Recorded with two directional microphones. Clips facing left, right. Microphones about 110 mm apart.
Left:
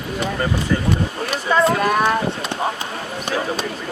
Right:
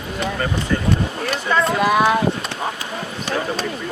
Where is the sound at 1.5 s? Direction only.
Centre (ahead or behind).